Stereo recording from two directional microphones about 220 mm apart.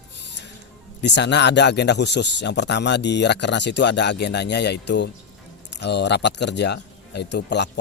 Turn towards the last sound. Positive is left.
turn(degrees=50)  # may be behind; listen again after turning